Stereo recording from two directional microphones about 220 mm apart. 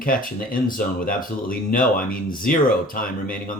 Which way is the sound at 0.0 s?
40° left (ahead or behind).